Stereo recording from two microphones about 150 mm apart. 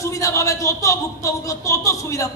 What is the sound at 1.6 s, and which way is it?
Speech, 20° left (ahead or behind).